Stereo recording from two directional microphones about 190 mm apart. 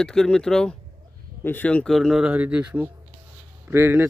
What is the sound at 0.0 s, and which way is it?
Speech, 5° left (ahead or behind).